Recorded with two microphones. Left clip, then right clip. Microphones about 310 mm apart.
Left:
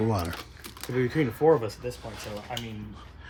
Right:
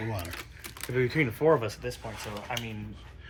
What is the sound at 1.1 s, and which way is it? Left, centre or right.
Speech, centre.